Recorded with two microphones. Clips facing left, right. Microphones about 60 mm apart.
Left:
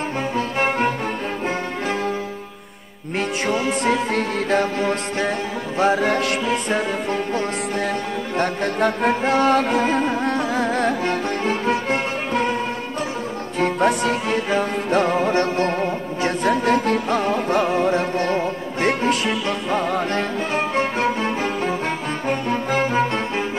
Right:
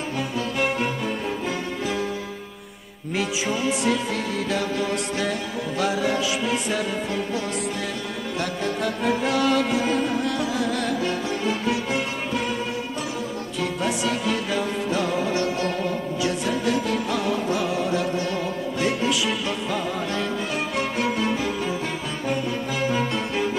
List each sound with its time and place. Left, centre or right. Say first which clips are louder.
0.6 s music: left 4 dB; left
3.2 s music: left 3 dB; left
13.6 s music: left 7 dB; left